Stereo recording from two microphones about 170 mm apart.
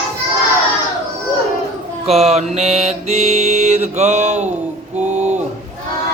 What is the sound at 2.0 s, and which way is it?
Mantra, 40° right (ahead or behind).